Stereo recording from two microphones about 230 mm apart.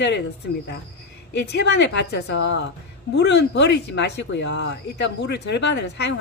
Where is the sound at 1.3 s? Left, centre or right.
Left.